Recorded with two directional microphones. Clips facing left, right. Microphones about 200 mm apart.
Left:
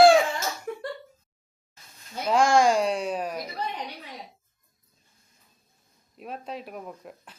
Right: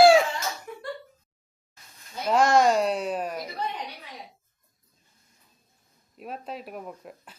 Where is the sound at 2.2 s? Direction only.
5° right (ahead or behind).